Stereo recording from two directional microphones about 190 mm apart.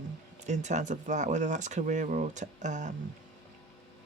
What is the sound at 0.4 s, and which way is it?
Speech, 40° right (ahead or behind).